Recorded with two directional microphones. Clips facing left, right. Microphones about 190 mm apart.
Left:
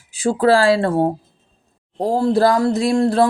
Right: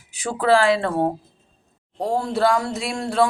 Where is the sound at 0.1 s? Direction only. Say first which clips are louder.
Left 4 dB; 30° left (ahead or behind).